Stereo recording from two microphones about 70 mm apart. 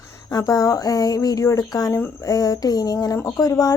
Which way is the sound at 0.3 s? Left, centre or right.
Left.